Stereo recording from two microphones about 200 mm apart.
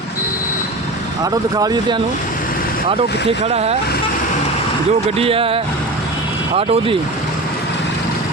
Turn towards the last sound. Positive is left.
turn(degrees=-30)  # may be behind; listen again after turning